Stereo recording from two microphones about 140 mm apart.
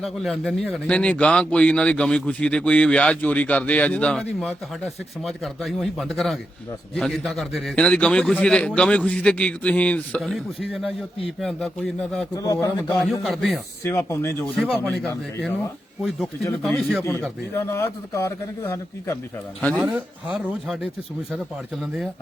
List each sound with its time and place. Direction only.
0.0 s a man's voice: centre (ahead or behind)
10.2 s a man's voice: centre (ahead or behind)
12.3 s a man's voice: 25° left (ahead or behind)
12.9 s a man's voice: centre (ahead or behind)
13.8 s speech: 15° left (ahead or behind)
14.6 s a man's voice: centre (ahead or behind)
15.0 s a man's voice: 15° left (ahead or behind)
16.6 s a man's voice: 5° left (ahead or behind)
17.0 s speech: 15° left (ahead or behind)
19.8 s speech: 10° right (ahead or behind)